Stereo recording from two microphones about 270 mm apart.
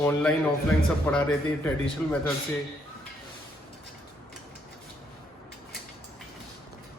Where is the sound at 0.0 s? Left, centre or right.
Centre.